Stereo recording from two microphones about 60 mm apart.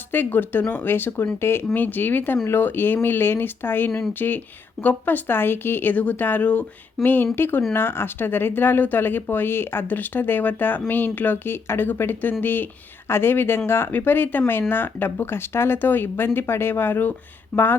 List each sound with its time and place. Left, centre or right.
0.1 s speech: left